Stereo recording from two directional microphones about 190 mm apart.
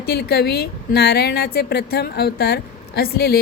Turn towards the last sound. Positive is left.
turn(degrees=55)  # may be behind; listen again after turning